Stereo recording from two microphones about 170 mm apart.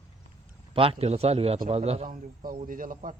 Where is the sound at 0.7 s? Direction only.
30° right (ahead or behind).